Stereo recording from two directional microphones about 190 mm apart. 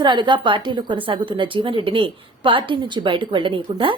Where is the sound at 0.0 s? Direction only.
25° right (ahead or behind).